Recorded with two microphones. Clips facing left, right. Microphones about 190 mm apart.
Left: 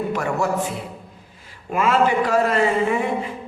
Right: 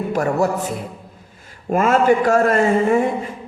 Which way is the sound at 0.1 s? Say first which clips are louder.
Right 4 dB; 40° right (ahead or behind).